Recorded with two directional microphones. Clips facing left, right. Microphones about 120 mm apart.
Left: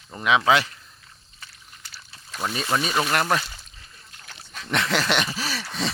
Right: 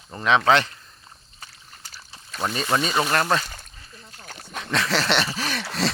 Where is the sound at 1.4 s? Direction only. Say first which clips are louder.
Right 1 dB; 40° right (ahead or behind).